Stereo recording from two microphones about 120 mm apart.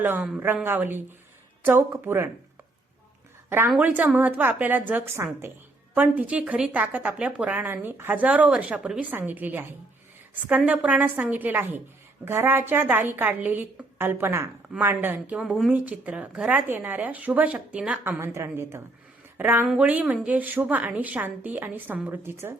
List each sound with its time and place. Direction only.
0.0 s a woman's voice: 15° right (ahead or behind)
3.8 s a woman's voice: 15° right (ahead or behind)
15.4 s a woman's voice: 5° right (ahead or behind); by 22.5 s 20° right (ahead or behind)